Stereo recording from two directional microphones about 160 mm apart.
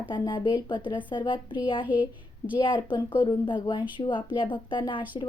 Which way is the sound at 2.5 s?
30° left (ahead or behind).